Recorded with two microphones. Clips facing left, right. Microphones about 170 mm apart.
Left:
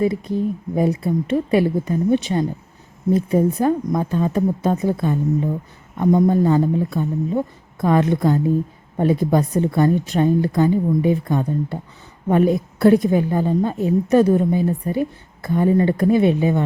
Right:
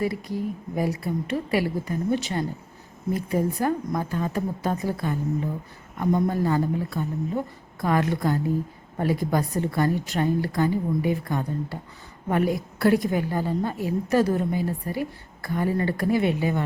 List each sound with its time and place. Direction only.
0.0 s a woman's voice: 25° left (ahead or behind)